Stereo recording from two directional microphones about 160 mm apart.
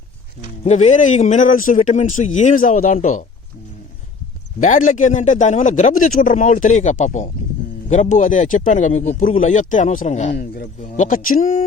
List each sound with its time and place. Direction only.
0.6 s a man's voice: 45° left (ahead or behind)
4.6 s a man's voice: 55° left (ahead or behind)
10.4 s speech: 65° left (ahead or behind)
10.9 s a man's voice: 50° left (ahead or behind)